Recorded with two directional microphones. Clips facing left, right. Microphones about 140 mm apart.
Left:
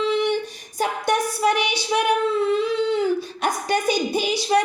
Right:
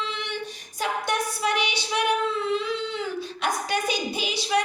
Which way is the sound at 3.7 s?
40° left (ahead or behind).